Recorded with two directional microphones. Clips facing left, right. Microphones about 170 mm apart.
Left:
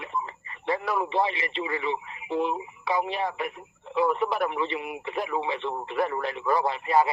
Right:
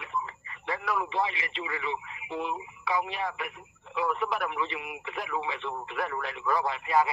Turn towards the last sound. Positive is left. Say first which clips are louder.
# left 3 dB
turn(degrees=30)  # may be behind; listen again after turning